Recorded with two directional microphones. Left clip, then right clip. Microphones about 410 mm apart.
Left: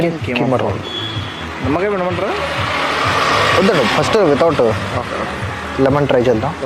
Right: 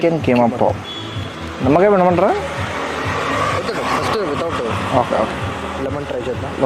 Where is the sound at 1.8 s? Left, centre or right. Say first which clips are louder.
Right 6 dB; right.